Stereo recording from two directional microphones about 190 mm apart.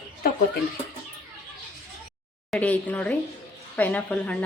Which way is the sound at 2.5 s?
10° left (ahead or behind).